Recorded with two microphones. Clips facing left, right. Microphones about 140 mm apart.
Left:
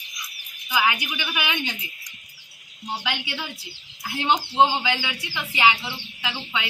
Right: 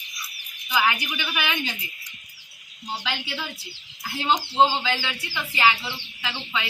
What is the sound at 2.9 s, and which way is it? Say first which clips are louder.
Speech: left 1 dB; 10° left (ahead or behind).